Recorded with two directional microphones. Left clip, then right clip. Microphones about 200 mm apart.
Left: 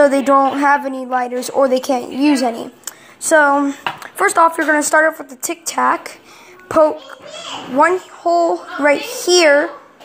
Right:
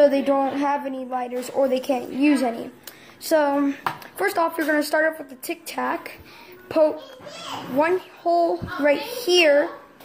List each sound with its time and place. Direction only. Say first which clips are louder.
0.0 s speech: left 7 dB; 25° left (ahead or behind)
7.7 s speech: left 8 dB; 20° left (ahead or behind)